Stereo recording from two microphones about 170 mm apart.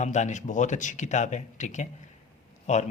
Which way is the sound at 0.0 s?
45° left (ahead or behind).